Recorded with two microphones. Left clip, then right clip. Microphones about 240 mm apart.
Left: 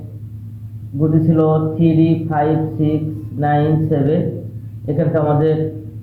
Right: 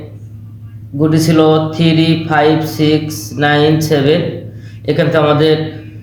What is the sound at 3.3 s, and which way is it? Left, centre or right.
Speech, right.